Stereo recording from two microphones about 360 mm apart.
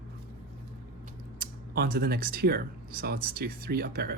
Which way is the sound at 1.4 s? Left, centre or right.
Right.